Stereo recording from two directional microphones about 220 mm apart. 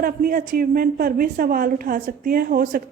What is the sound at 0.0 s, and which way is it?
A woman's voice, 40° right (ahead or behind).